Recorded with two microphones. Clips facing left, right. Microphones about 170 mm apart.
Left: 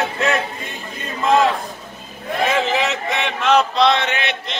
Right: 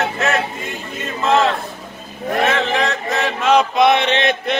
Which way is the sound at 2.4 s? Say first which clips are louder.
Left 1 dB; 10° left (ahead or behind).